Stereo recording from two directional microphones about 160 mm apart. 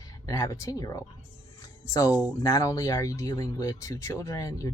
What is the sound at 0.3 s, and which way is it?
Speech, 20° left (ahead or behind).